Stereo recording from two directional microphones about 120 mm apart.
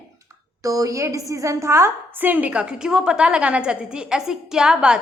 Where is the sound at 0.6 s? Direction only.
30° right (ahead or behind).